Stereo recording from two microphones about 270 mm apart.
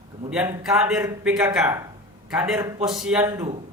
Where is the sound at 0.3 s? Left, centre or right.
Centre.